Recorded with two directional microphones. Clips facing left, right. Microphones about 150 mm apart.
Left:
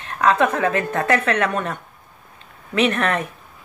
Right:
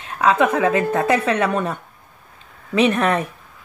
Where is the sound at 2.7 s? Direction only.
10° right (ahead or behind).